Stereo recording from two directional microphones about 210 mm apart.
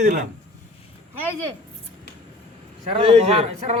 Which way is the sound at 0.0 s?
35° right (ahead or behind).